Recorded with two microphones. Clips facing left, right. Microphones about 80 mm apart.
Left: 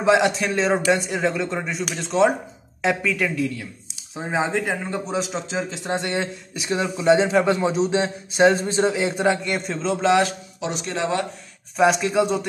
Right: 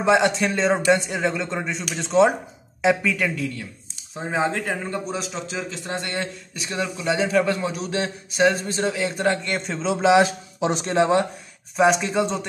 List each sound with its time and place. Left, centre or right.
0.0 s speech: centre
4.3 s a man's voice: centre
9.2 s speech: centre
10.1 s speech: right
11.7 s speech: centre